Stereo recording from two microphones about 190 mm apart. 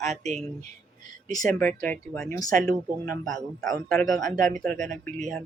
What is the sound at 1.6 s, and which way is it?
Speech, 10° left (ahead or behind).